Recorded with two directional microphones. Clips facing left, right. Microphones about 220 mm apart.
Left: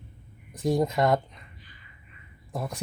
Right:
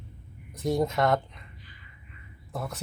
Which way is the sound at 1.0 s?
20° left (ahead or behind).